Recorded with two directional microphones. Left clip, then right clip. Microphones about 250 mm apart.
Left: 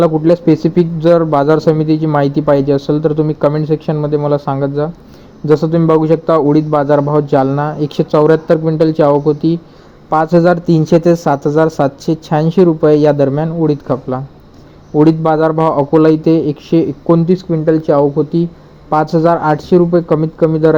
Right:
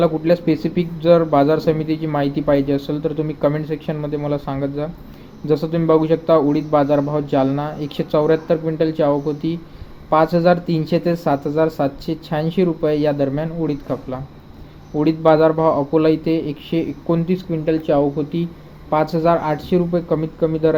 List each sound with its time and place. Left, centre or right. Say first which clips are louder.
0.0 s a man's voice: left 6 dB; left
17.3 s speech: left 7 dB; centre
17.8 s a man's voice: left 6 dB; left